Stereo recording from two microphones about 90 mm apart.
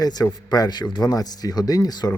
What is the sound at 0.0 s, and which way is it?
Speech, 45° left (ahead or behind).